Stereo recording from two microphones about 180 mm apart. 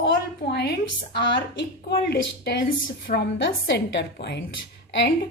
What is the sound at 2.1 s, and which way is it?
A woman's voice, 70° left (ahead or behind).